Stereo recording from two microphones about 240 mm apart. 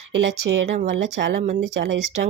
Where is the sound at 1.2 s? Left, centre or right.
Right.